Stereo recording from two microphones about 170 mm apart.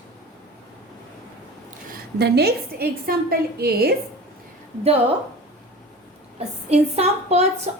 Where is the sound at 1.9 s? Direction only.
75° right (ahead or behind).